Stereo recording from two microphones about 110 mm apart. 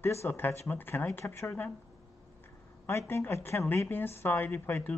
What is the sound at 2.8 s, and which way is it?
Speech, 25° left (ahead or behind).